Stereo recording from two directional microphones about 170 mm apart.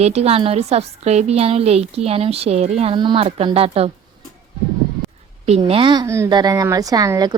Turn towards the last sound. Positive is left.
turn(degrees=-20)  # may be behind; listen again after turning